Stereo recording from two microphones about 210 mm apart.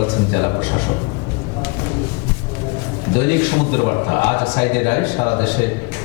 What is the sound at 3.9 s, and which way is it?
A man's voice, 25° left (ahead or behind).